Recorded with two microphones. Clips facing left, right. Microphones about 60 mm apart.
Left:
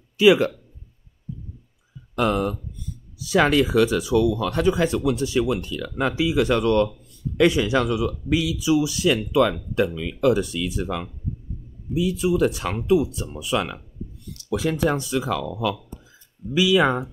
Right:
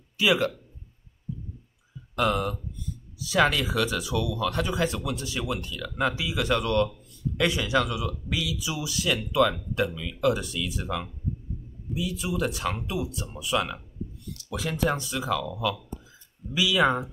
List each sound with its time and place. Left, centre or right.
0.2 s speech: centre
2.1 s speech: left
14.9 s speech: centre